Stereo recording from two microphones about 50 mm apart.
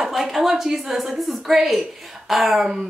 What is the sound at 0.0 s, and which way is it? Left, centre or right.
Speech, centre.